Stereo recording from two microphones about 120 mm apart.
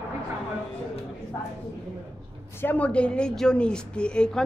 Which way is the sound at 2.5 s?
15° left (ahead or behind).